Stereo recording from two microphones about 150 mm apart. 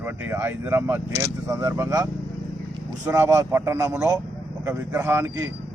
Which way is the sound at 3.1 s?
15° right (ahead or behind).